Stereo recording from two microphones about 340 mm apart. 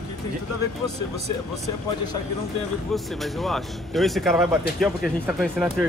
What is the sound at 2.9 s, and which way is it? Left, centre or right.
Speech, centre.